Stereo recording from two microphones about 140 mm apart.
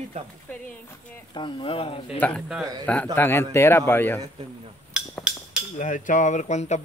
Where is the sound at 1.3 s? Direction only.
35° left (ahead or behind).